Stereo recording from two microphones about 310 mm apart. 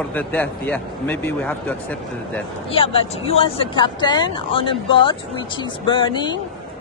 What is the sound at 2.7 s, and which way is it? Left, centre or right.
Speech, centre.